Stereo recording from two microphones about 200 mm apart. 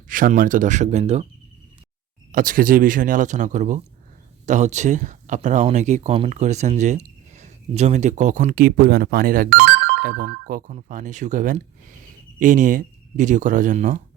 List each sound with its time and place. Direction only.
0.1 s speech: 45° right (ahead or behind)
2.3 s speech: 45° right (ahead or behind)
9.5 s telephone bell ringing: 60° right (ahead or behind)
10.4 s speech: 40° right (ahead or behind)